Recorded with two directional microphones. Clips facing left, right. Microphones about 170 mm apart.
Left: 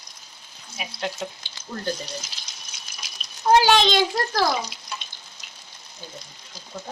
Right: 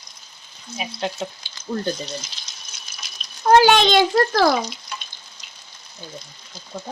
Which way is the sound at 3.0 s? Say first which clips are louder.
Even; 10° left (ahead or behind).